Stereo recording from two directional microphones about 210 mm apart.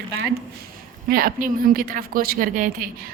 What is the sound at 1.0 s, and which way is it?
Speech, 45° right (ahead or behind).